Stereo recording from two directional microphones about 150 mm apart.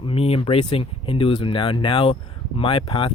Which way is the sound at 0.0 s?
40° left (ahead or behind).